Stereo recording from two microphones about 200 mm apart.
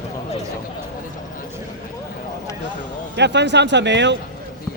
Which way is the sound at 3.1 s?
60° right (ahead or behind).